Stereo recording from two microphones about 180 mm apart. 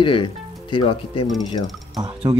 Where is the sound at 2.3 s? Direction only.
20° right (ahead or behind).